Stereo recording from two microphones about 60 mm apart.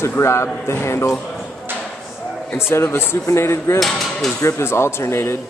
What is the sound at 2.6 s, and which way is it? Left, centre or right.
A man's voice, left.